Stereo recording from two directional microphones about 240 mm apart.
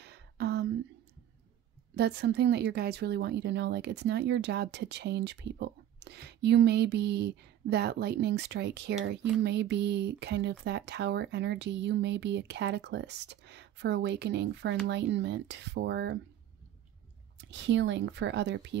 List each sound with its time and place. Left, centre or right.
0.0 s a sound: right
2.0 s a woman's voice: right
17.4 s a woman's voice: right